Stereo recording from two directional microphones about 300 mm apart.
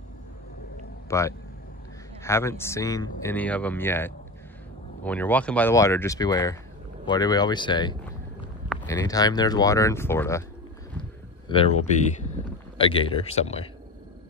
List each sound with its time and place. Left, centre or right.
1.1 s speech: centre
11.4 s speech: centre